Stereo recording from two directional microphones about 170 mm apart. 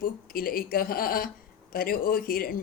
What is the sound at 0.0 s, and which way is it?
Speech, 60° left (ahead or behind).